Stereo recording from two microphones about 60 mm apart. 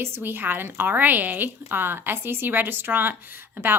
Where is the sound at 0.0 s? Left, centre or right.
Right.